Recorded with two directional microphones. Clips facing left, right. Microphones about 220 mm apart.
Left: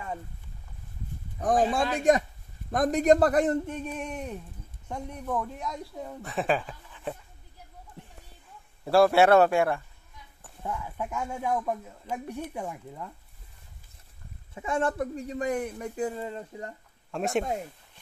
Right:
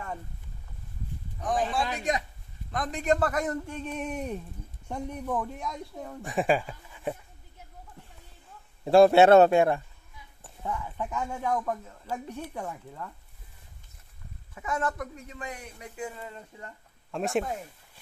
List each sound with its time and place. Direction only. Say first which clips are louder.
1.4 s speech: left 4 dB; 45° left (ahead or behind)
3.6 s speech: left 2 dB; 15° left (ahead or behind)
4.8 s speech: right 1 dB; 5° right (ahead or behind)
6.2 s a sound: right 2 dB; 10° right (ahead or behind)
8.8 s a man's voice: right 3 dB; 20° right (ahead or behind)
10.6 s speech: even; 5° left (ahead or behind)
14.5 s speech: left 3 dB; 30° left (ahead or behind); by 16.1 s 50° left (ahead or behind)
16.2 s speech: left 7 dB; 30° left (ahead or behind)
17.1 s speech: even; centre (ahead or behind)